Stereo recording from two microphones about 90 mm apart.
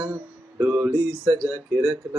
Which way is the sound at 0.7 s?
15° right (ahead or behind).